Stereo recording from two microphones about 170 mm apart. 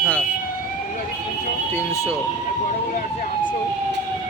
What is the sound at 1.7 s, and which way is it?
Speech, 15° left (ahead or behind).